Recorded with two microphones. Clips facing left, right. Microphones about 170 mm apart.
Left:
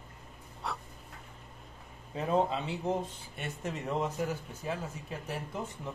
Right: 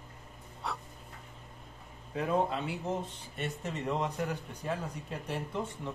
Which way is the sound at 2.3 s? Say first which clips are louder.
Left 2 dB; 25° left (ahead or behind).